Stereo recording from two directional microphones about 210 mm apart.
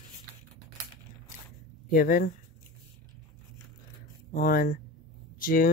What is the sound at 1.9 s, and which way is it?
Speech, 40° left (ahead or behind).